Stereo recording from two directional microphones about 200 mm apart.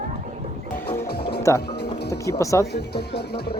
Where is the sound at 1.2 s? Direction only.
55° left (ahead or behind).